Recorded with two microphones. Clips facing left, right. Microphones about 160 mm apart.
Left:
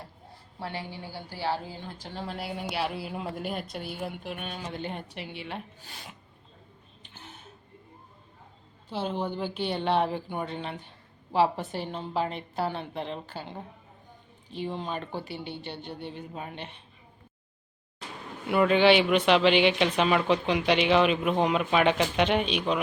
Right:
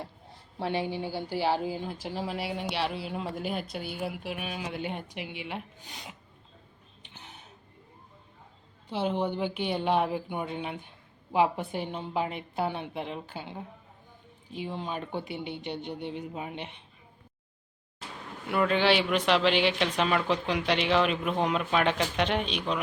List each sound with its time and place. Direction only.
0.6 s a woman's voice: 20° right (ahead or behind)
7.1 s a sound: 15° right (ahead or behind)
8.9 s a woman's voice: 15° right (ahead or behind)
18.4 s speech: 5° left (ahead or behind)